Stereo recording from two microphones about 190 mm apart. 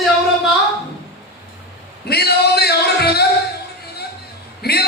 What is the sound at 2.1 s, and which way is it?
Music, 55° left (ahead or behind).